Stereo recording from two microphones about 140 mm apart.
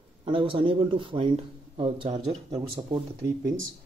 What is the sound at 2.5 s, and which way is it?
Speech, 30° right (ahead or behind).